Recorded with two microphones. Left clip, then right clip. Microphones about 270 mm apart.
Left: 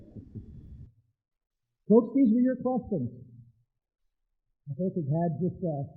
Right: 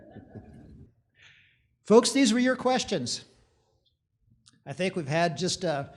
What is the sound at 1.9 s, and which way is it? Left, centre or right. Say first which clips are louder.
Speech: right 3 dB; right.